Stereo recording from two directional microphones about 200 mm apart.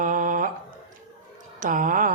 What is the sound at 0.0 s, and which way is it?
Mantra, 40° right (ahead or behind).